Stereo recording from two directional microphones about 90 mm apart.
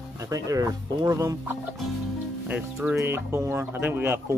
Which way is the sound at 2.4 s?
20° right (ahead or behind).